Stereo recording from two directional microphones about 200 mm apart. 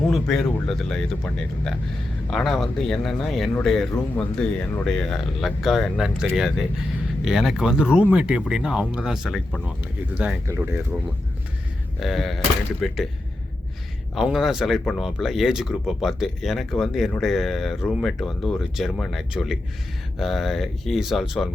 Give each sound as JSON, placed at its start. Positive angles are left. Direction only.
{"t": 0.0, "sound": "speech", "side_deg": 0}
{"t": 11.9, "sound": "speech", "side_deg": 0}
{"t": 14.2, "sound": "speech", "side_deg": 0}